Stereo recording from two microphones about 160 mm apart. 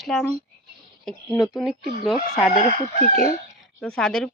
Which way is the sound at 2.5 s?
70° left (ahead or behind).